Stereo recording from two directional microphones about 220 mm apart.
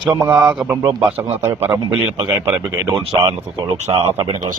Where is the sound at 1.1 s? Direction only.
25° right (ahead or behind).